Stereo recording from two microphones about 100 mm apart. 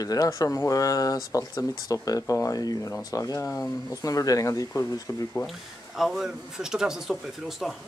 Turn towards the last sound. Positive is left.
turn(degrees=0)  # may be behind; listen again after turning